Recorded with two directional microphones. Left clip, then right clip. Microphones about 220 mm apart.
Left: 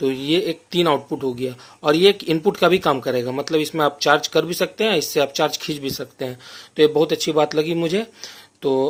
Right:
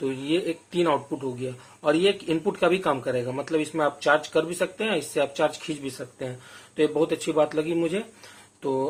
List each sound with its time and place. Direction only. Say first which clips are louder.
0.0 s speech: left 6 dB; 50° left (ahead or behind)